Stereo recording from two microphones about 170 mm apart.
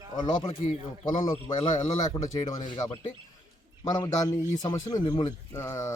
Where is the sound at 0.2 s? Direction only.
30° left (ahead or behind).